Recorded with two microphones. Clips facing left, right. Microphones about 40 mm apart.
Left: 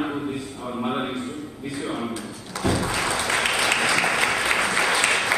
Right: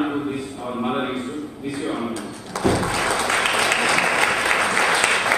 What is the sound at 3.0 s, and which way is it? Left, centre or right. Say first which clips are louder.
Applause: right 3 dB; centre.